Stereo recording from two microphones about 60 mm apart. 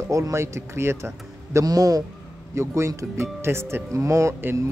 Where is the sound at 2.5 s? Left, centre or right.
Right.